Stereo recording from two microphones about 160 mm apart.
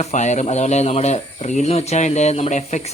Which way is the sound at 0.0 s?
45° left (ahead or behind).